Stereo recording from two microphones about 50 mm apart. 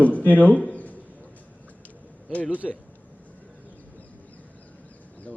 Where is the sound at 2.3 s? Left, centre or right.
Left.